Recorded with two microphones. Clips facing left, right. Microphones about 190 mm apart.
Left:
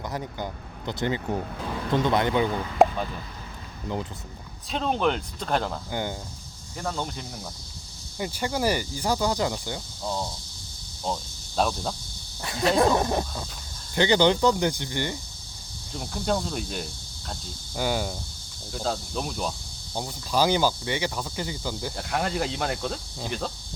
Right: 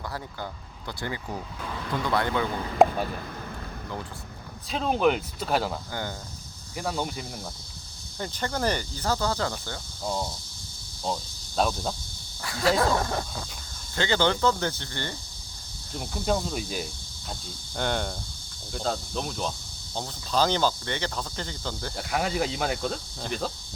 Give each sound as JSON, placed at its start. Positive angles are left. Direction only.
{"t": 0.1, "sound": "speech", "side_deg": 15}
{"t": 2.8, "sound": "a sound", "side_deg": 0}
{"t": 4.7, "sound": "speech", "side_deg": -5}
{"t": 5.9, "sound": "speech", "side_deg": 20}
{"t": 6.7, "sound": "speech", "side_deg": -10}
{"t": 8.2, "sound": "speech", "side_deg": 10}
{"t": 11.0, "sound": "speech", "side_deg": 0}
{"t": 12.4, "sound": "speech", "side_deg": 20}
{"t": 15.9, "sound": "speech", "side_deg": 0}
{"t": 21.9, "sound": "speech", "side_deg": 0}